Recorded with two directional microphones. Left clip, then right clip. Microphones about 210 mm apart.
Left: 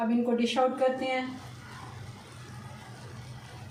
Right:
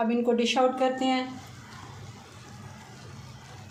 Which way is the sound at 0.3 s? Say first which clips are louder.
Right 1 dB; 50° right (ahead or behind).